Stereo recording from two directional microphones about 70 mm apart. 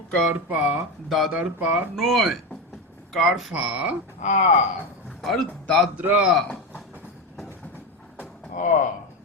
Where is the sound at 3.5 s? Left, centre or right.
Centre.